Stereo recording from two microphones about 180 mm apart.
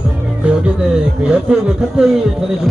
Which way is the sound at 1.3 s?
5° right (ahead or behind).